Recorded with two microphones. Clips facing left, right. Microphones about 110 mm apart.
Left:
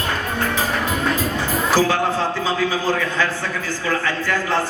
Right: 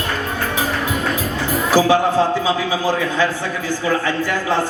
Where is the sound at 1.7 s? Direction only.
15° right (ahead or behind).